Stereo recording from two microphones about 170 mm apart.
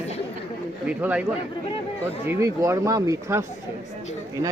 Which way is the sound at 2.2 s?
15° right (ahead or behind).